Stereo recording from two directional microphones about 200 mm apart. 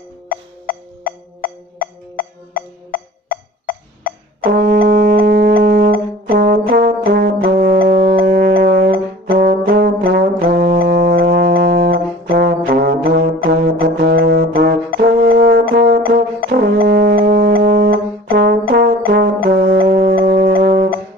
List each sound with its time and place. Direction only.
0.3 s music: 45° left (ahead or behind)
4.5 s brass instrument: 50° right (ahead or behind)
7.6 s music: 50° right (ahead or behind)
15.0 s brass instrument: 50° right (ahead or behind)
15.7 s music: 55° right (ahead or behind)
16.4 s brass instrument: 50° right (ahead or behind)
19.5 s music: 50° right (ahead or behind)